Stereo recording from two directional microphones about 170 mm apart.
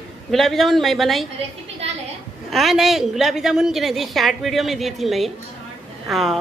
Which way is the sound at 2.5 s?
Centre (ahead or behind).